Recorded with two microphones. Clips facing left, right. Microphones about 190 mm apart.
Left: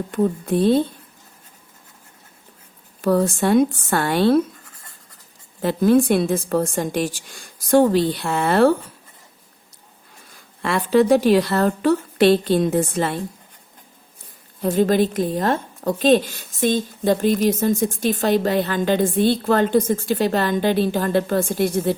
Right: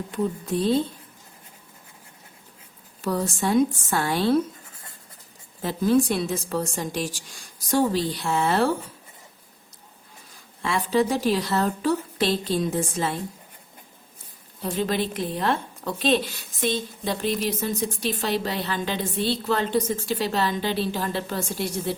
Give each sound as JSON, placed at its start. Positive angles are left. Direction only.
{"t": 0.1, "sound": "a woman's voice", "side_deg": 55}
{"t": 3.0, "sound": "a woman's voice", "side_deg": 55}
{"t": 5.6, "sound": "a woman's voice", "side_deg": 60}
{"t": 10.6, "sound": "a woman's voice", "side_deg": 60}
{"t": 14.6, "sound": "a woman's voice", "side_deg": 45}